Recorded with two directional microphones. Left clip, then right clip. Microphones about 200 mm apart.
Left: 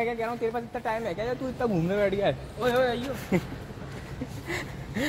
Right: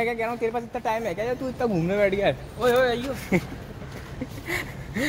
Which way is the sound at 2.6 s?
60° right (ahead or behind).